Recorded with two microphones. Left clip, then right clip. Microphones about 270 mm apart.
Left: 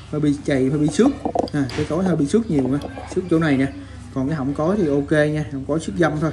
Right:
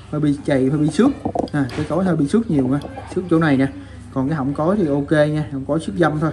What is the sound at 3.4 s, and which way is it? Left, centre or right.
Speech, right.